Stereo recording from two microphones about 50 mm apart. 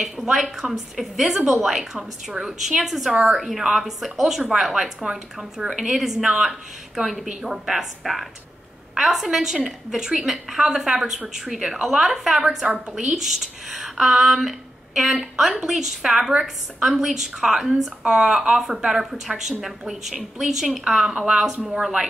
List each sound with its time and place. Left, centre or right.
0.0 s a woman's voice: centre